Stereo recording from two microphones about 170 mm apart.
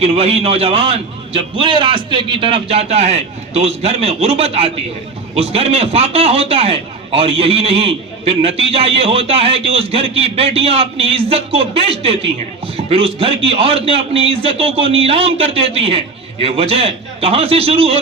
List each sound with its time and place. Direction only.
0.0 s a man's voice: 35° right (ahead or behind)